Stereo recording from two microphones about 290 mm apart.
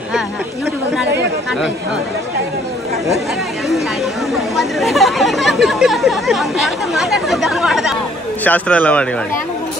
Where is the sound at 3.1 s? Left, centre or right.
Centre.